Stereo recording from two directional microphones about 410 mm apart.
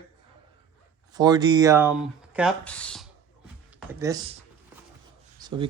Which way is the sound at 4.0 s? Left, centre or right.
Centre.